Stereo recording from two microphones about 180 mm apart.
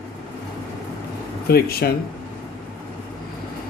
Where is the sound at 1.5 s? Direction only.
60° left (ahead or behind).